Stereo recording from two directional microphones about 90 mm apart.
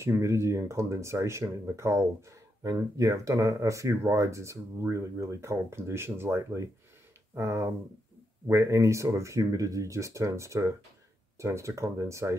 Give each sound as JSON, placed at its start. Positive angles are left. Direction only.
{"t": 0.0, "sound": "speech", "side_deg": -30}